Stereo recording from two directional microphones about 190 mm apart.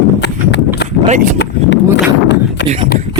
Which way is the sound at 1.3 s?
65° left (ahead or behind).